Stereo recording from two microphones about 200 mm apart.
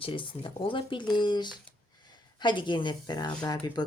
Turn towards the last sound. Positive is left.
turn(degrees=20)  # may be behind; listen again after turning